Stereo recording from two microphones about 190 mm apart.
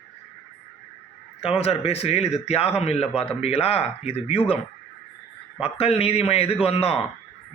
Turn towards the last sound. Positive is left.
turn(degrees=30)  # may be behind; listen again after turning